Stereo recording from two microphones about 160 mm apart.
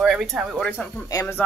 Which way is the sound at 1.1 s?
20° left (ahead or behind).